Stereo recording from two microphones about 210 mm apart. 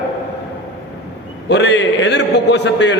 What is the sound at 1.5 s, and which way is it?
A man's voice, 55° left (ahead or behind).